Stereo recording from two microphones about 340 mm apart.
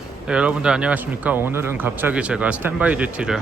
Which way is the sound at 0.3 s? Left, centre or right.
Centre.